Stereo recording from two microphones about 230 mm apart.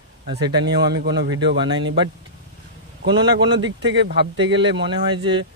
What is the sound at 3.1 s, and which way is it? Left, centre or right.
Speech, centre.